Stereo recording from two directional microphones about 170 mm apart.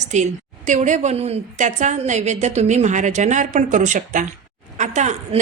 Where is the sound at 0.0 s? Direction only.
45° right (ahead or behind).